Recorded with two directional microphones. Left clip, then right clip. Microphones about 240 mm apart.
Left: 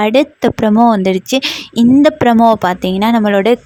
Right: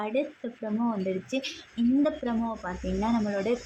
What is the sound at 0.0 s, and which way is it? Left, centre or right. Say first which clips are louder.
A woman's voice: left 19 dB; left.